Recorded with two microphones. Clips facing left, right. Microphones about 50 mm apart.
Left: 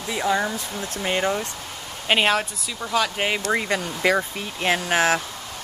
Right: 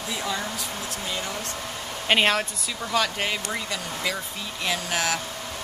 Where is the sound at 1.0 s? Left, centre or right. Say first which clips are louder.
Left 10 dB; left.